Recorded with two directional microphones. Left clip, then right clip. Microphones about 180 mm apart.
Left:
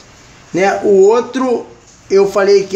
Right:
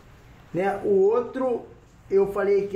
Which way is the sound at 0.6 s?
45° left (ahead or behind).